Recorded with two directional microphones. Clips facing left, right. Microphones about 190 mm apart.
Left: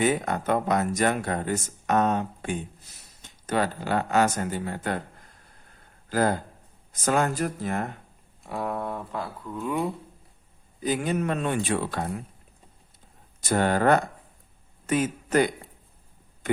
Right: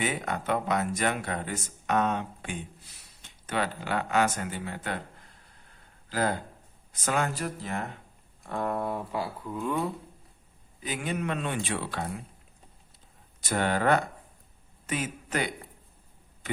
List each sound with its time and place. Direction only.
0.0 s speech: 40° left (ahead or behind)
6.1 s speech: 45° left (ahead or behind)
8.4 s speech: 5° left (ahead or behind)
10.8 s speech: 40° left (ahead or behind)
13.4 s a man's voice: 45° left (ahead or behind)